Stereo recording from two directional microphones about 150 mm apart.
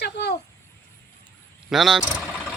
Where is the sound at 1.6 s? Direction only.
Centre (ahead or behind).